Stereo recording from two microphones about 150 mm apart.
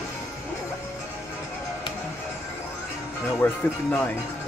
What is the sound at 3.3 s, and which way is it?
Speech, 10° left (ahead or behind).